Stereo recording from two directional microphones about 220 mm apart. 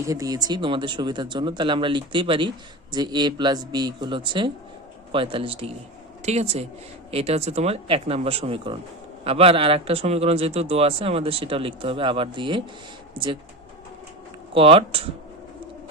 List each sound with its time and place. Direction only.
0.0 s a man's voice: 15° right (ahead or behind)
14.5 s a man's voice: 25° right (ahead or behind)